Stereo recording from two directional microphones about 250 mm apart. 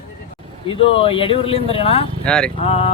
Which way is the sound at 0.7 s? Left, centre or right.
Left.